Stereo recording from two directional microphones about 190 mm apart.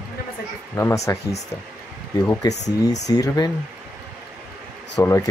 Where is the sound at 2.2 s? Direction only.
15° left (ahead or behind).